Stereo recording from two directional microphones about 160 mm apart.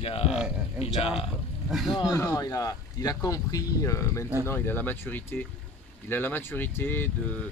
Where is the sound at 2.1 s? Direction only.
20° left (ahead or behind).